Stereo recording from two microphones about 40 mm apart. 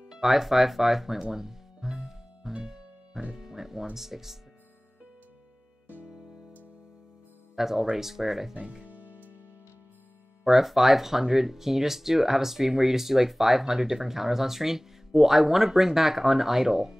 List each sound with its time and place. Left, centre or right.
0.2 s music: centre
3.9 s speech: centre
7.5 s speech: centre
8.8 s music: right
10.4 s speech: centre